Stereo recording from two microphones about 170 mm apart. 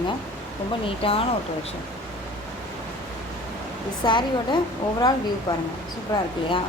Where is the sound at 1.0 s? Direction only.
35° left (ahead or behind).